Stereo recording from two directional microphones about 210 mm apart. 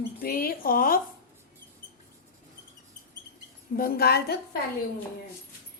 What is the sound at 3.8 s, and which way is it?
Speech, 50° left (ahead or behind).